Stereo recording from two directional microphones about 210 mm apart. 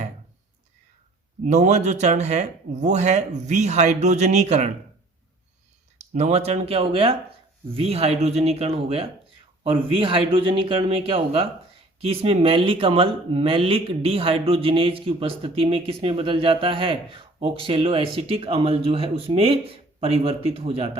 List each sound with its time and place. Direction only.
1.5 s speech: 35° right (ahead or behind)
6.1 s speech: 30° right (ahead or behind)